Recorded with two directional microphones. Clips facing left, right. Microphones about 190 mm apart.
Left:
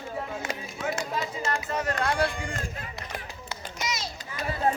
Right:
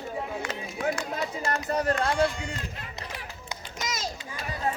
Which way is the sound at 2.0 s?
20° right (ahead or behind).